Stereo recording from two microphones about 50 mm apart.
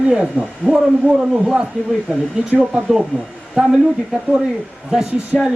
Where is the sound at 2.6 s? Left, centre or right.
Centre.